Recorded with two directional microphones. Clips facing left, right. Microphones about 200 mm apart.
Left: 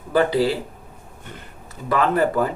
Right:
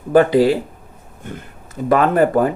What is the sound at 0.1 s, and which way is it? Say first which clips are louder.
Speech: right 6 dB; 50° right (ahead or behind).